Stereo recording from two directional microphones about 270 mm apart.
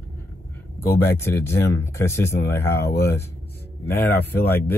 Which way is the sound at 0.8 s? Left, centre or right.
Left.